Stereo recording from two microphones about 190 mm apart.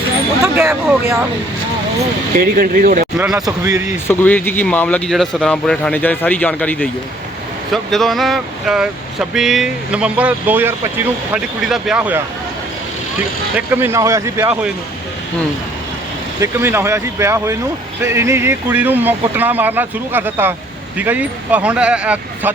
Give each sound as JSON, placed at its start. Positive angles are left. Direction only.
{"t": 0.4, "sound": "speech", "side_deg": -5}
{"t": 2.3, "sound": "speech", "side_deg": -50}
{"t": 3.2, "sound": "speech", "side_deg": -10}
{"t": 4.1, "sound": "speech", "side_deg": 10}
{"t": 13.6, "sound": "speech", "side_deg": -10}
{"t": 16.4, "sound": "speech", "side_deg": -15}